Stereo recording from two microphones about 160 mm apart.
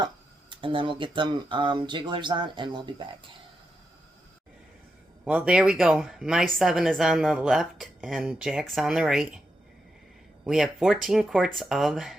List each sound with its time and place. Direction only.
0.5 s speech: 30° right (ahead or behind)
5.2 s speech: 5° right (ahead or behind)
10.4 s speech: 5° right (ahead or behind)